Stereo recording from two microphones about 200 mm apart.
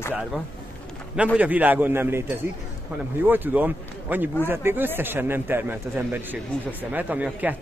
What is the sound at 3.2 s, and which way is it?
A man's voice, 10° right (ahead or behind).